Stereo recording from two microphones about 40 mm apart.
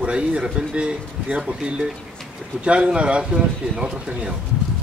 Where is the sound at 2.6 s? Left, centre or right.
Right.